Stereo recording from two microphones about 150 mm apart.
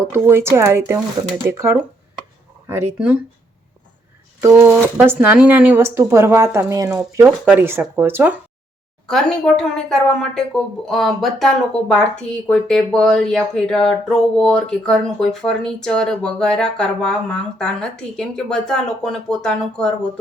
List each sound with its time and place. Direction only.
0.1 s speech: 15° right (ahead or behind)
4.4 s speech: 15° right (ahead or behind)
9.0 s speech: 5° left (ahead or behind)